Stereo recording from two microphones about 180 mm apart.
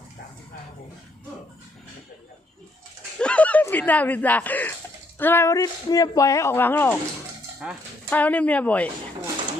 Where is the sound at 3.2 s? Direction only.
5° left (ahead or behind).